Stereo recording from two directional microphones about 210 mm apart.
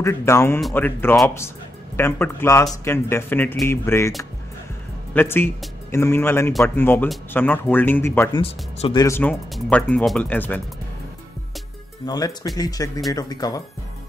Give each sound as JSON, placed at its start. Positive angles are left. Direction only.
{"t": 0.0, "sound": "speech", "side_deg": 15}
{"t": 5.1, "sound": "speech", "side_deg": 10}
{"t": 8.4, "sound": "speech", "side_deg": 25}
{"t": 12.1, "sound": "speech", "side_deg": 20}